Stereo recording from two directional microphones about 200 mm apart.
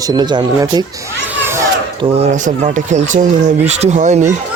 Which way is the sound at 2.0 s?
30° right (ahead or behind).